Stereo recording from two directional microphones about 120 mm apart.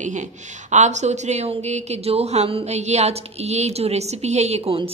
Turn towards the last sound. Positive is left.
turn(degrees=-55)  # may be behind; listen again after turning